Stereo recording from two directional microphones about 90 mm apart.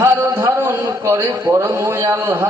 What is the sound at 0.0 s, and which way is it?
A man's voice, 30° right (ahead or behind).